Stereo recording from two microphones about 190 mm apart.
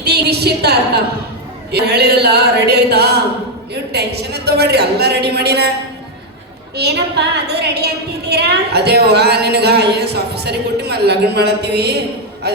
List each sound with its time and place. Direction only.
0.0 s a woman's voice: 60° right (ahead or behind)
6.7 s a woman's voice: 60° right (ahead or behind)